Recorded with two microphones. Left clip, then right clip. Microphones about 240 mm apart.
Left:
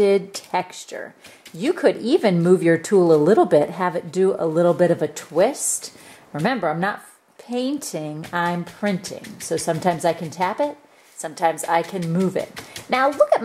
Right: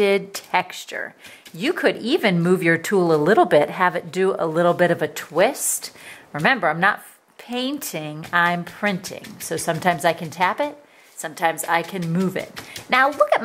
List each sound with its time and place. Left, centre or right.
0.0 s speech: centre
3.0 s speech: right
3.3 s speech: centre